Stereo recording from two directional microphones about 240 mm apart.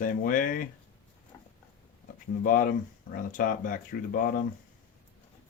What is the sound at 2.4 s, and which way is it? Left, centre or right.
Speech, left.